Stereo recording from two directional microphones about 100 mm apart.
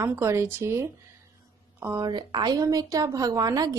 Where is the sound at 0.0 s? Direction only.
25° right (ahead or behind).